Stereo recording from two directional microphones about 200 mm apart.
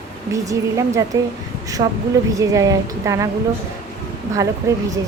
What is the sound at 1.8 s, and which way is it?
Speech, 25° right (ahead or behind).